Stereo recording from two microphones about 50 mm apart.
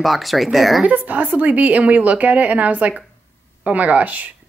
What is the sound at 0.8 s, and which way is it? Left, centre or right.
A woman's voice, right.